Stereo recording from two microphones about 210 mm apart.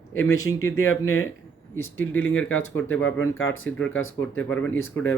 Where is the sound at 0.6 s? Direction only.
80° left.